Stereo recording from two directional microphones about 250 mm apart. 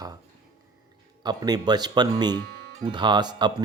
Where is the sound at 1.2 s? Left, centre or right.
Centre.